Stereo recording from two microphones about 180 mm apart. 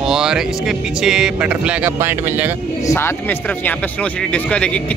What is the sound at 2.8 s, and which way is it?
Speech, 15° left (ahead or behind).